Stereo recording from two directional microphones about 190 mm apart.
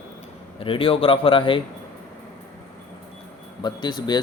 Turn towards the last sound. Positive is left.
turn(degrees=25)  # may be behind; listen again after turning